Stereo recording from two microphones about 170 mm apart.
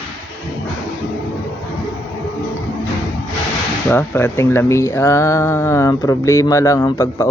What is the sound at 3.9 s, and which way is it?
Speech, 15° left (ahead or behind).